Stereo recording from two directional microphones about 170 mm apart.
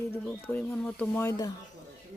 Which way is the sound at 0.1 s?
10° left (ahead or behind).